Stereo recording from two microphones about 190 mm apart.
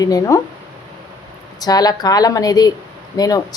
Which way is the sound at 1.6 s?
20° left (ahead or behind).